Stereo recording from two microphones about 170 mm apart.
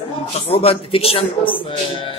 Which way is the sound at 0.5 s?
35° left (ahead or behind).